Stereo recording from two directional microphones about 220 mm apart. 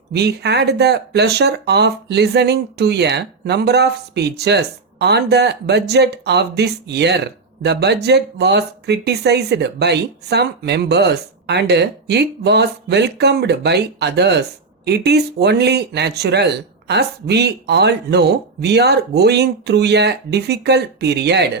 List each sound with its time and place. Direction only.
0.1 s speech: 50° right (ahead or behind)